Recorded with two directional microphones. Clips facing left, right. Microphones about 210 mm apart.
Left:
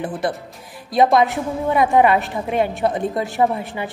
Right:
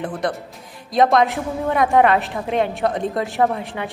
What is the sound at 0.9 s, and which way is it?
A woman's voice, centre (ahead or behind).